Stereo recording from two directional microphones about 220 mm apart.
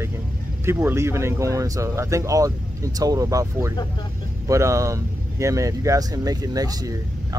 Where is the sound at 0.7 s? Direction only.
10° right (ahead or behind).